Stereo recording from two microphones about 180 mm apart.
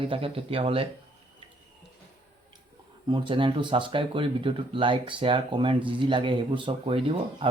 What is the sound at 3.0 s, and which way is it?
Speech, 25° right (ahead or behind).